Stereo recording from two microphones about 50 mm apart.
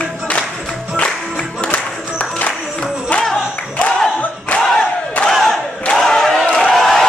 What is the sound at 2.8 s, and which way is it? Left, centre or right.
Music, centre.